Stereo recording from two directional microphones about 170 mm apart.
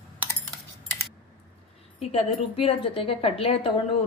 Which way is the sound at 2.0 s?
35° left (ahead or behind).